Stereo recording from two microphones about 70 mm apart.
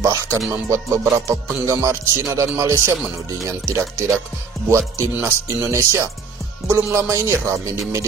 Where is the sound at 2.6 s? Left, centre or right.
Right.